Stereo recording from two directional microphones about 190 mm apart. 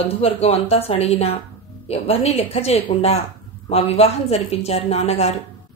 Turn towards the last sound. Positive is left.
turn(degrees=35)  # may be behind; listen again after turning